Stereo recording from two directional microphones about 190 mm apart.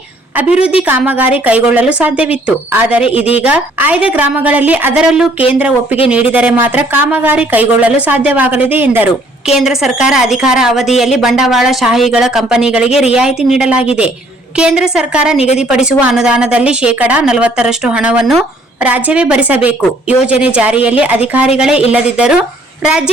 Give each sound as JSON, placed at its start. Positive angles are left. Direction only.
{"t": 0.3, "sound": "speech", "side_deg": -5}
{"t": 0.6, "sound": "a woman's voice", "side_deg": 30}
{"t": 0.9, "sound": "a woman's voice", "side_deg": -10}
{"t": 21.9, "sound": "a woman's voice", "side_deg": -5}